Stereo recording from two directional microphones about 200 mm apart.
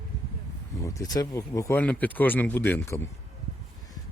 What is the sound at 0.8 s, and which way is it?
Speech, 15° left (ahead or behind).